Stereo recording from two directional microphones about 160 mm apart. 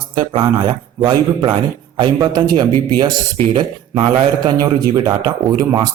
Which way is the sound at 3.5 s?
30° right (ahead or behind).